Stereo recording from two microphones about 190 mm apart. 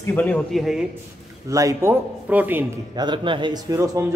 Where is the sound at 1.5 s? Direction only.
15° right (ahead or behind).